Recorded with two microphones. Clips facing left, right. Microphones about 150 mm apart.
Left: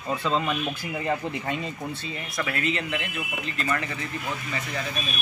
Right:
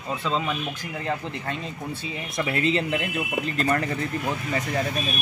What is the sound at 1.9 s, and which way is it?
Speech, 15° right (ahead or behind).